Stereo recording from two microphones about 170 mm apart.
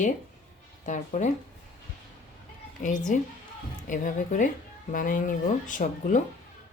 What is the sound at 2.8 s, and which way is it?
A woman's voice, 50° left (ahead or behind).